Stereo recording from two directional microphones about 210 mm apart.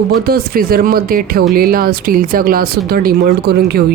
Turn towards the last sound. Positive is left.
turn(degrees=-50)  # may be behind; listen again after turning